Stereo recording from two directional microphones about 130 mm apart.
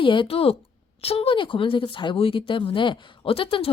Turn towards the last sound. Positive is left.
turn(degrees=45)  # may be behind; listen again after turning